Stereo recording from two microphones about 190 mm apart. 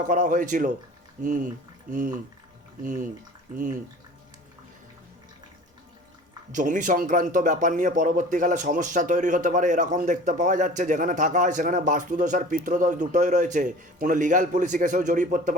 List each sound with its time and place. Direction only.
0.0 s speech: 45° right (ahead or behind)
6.5 s speech: 40° right (ahead or behind)